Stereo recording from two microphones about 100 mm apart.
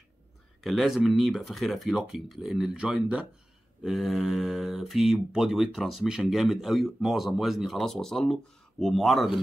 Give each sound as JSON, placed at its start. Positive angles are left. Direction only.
{"t": 0.6, "sound": "speech", "side_deg": 0}